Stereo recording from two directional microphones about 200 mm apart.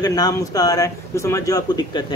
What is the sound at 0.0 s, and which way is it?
Speech, 20° left (ahead or behind).